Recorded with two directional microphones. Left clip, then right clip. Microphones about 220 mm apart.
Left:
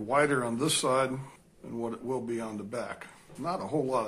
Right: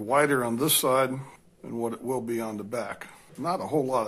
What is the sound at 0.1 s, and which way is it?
A man's voice, 35° right (ahead or behind).